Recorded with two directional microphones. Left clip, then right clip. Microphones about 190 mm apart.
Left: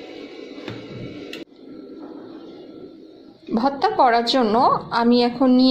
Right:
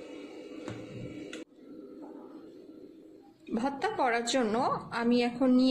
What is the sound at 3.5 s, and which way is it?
A woman's voice, 10° left (ahead or behind).